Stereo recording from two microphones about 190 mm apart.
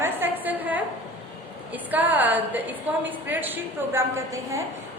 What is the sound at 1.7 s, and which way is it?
A woman's voice, 10° right (ahead or behind).